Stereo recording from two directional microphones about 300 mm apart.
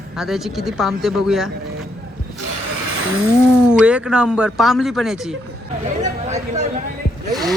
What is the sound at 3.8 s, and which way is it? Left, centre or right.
Speech, centre.